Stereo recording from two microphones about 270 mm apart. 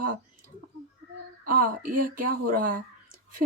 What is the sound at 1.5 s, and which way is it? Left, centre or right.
Speech, right.